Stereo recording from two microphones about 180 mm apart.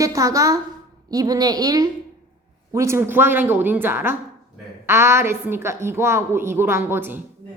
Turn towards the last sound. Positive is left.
turn(degrees=-10)  # may be behind; listen again after turning